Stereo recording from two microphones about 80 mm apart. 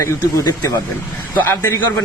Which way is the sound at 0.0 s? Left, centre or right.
Left.